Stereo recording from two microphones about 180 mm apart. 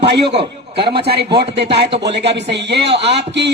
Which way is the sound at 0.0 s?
70° right (ahead or behind).